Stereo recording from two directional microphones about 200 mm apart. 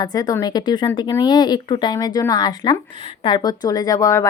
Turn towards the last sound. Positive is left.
turn(degrees=15)  # may be behind; listen again after turning